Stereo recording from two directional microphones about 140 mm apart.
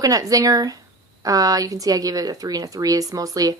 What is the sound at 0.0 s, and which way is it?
Speech, 25° right (ahead or behind).